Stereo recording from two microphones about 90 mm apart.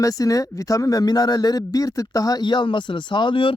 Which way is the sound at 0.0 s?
40° left (ahead or behind).